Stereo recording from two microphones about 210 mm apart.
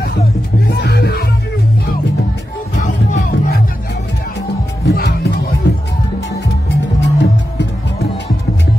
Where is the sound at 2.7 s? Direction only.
35° left (ahead or behind).